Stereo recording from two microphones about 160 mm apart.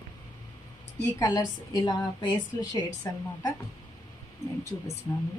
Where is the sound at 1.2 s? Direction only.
25° left (ahead or behind).